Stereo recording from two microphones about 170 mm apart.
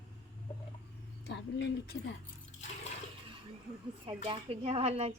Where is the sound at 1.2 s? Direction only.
85° left.